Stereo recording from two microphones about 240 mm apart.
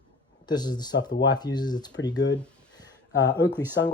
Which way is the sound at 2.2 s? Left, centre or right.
Left.